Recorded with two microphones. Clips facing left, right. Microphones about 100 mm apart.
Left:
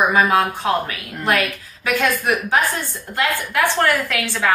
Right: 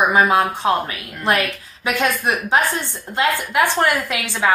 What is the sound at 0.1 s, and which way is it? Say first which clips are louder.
A woman's voice: right 1 dB; 30° right (ahead or behind).